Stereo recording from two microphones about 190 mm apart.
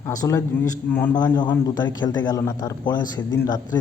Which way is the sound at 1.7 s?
20° left (ahead or behind).